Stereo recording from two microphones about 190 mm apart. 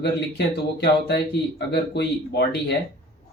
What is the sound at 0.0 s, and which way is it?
Speech, 60° left (ahead or behind).